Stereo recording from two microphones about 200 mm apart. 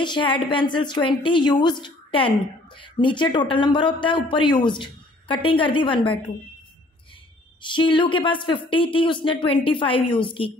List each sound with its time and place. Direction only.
0.0 s speech: 25° left (ahead or behind)
7.6 s speech: 25° left (ahead or behind)